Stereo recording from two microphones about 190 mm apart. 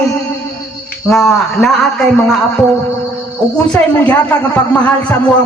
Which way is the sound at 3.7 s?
5° left (ahead or behind).